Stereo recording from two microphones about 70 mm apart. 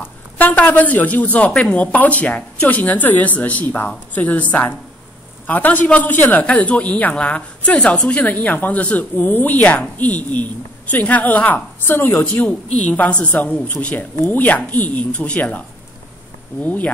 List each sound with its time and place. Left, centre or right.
0.0 s a woman's voice: left
11.8 s a woman's voice: left